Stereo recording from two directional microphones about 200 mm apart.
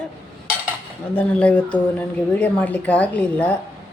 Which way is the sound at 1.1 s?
5° left (ahead or behind).